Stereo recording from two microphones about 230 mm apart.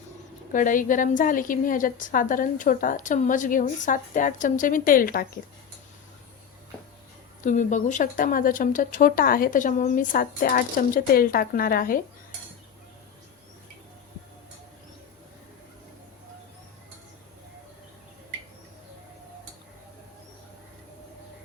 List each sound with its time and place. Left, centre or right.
0.5 s a woman's voice: left
7.4 s a woman's voice: left